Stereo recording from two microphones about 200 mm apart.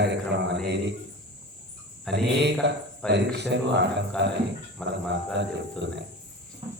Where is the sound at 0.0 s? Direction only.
60° right (ahead or behind).